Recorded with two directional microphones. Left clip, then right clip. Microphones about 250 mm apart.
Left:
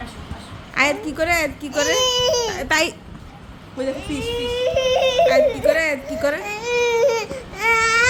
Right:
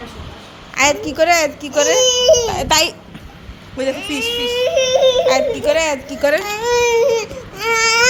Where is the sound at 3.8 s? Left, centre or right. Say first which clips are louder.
Right 5 dB; centre.